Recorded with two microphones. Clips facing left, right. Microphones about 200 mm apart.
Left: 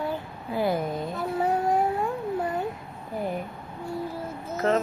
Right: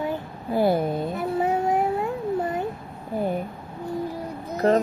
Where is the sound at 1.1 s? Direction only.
20° right (ahead or behind).